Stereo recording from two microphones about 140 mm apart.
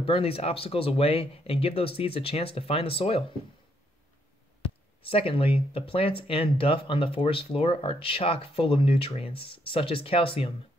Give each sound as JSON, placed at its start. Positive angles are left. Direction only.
{"t": 0.0, "sound": "speech", "side_deg": 40}
{"t": 5.1, "sound": "speech", "side_deg": 40}